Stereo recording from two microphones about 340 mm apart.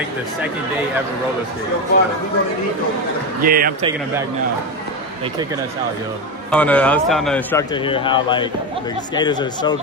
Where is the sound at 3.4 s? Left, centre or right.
Right.